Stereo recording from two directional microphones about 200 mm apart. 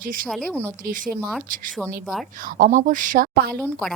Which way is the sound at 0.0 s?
45° right (ahead or behind).